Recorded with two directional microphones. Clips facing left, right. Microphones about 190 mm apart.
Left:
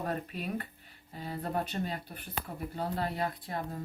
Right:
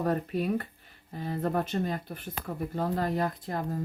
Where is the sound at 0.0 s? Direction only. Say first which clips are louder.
Right 7 dB; 40° right (ahead or behind).